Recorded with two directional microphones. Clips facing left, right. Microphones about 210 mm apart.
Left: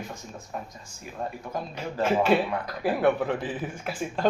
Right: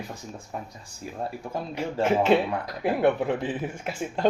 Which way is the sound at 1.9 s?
25° right (ahead or behind).